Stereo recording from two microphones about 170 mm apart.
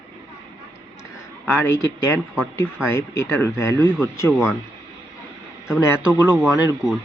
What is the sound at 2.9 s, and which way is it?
Speech, 15° left (ahead or behind).